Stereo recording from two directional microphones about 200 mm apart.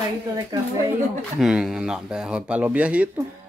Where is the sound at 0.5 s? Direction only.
20° right (ahead or behind).